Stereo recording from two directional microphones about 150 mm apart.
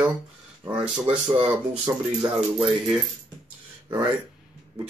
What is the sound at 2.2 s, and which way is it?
Speech, 5° right (ahead or behind).